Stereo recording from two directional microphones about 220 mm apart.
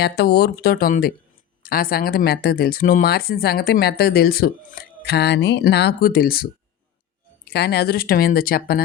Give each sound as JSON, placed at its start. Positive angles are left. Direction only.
{"t": 0.0, "sound": "speech", "side_deg": 45}